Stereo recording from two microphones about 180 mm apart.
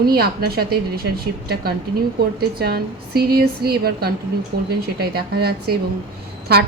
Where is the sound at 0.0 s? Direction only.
60° right (ahead or behind).